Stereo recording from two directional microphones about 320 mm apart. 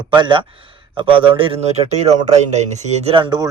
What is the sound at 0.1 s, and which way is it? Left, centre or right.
Speech, centre.